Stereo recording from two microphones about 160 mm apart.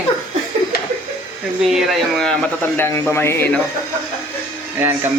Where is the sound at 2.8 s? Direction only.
15° left (ahead or behind).